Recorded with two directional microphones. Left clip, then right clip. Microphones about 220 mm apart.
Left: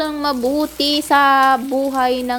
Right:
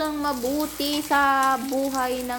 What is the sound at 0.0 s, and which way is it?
Frying, 35° left (ahead or behind).